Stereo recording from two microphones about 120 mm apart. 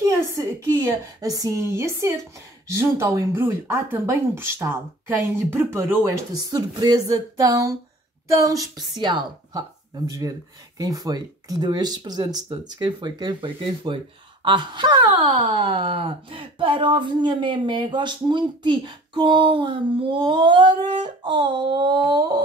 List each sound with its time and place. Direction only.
0.0 s a woman's voice: 25° right (ahead or behind)
6.5 s speech: 35° right (ahead or behind)